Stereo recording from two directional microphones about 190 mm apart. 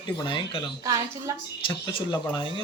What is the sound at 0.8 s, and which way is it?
Speech, 20° right (ahead or behind).